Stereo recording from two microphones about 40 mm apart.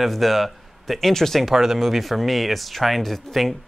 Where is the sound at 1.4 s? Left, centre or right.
Centre.